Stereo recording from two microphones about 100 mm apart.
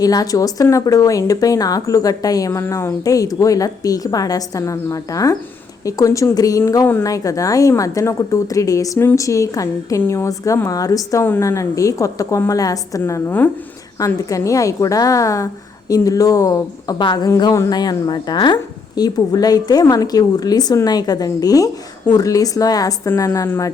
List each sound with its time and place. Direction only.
0.0 s a woman's voice: 40° left (ahead or behind)